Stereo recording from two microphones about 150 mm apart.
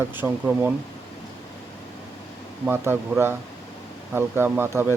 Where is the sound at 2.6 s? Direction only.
15° right (ahead or behind).